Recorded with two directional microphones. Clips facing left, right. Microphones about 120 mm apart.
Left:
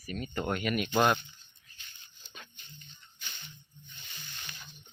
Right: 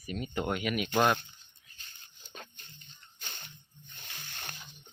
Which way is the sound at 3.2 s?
45° right (ahead or behind).